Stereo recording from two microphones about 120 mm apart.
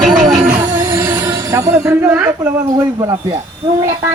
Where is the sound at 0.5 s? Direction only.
20° right (ahead or behind).